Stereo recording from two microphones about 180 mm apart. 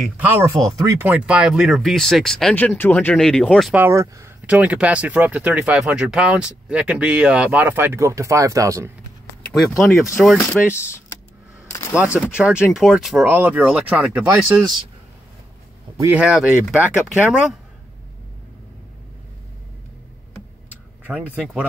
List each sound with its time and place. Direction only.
0.5 s speech: 20° right (ahead or behind); by 3.8 s centre (ahead or behind)
3.8 s speech: 15° right (ahead or behind)
9.4 s speech: centre (ahead or behind)
10.7 s speech: 15° left (ahead or behind)
12.3 s speech: 5° right (ahead or behind)
16.0 s speech: 10° right (ahead or behind)
21.0 s speech: 5° right (ahead or behind)